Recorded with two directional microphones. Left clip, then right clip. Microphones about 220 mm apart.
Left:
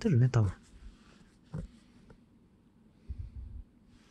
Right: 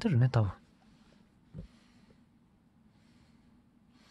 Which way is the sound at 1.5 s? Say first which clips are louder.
Left 7 dB; 45° left (ahead or behind).